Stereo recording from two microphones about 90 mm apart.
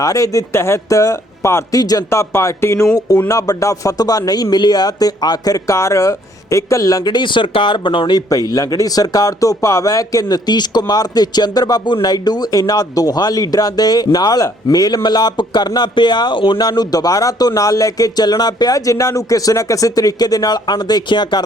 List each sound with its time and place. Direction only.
0.0 s speech: 40° left (ahead or behind)
3.2 s a man's voice: 40° left (ahead or behind); by 8.2 s 60° left (ahead or behind)
8.3 s a man's voice: 40° left (ahead or behind); by 21.4 s 55° left (ahead or behind)